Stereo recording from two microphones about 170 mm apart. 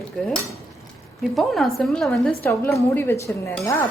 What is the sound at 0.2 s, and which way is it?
Speech, centre (ahead or behind).